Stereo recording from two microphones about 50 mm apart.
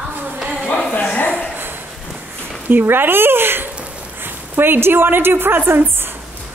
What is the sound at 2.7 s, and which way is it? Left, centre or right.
A woman's voice, right.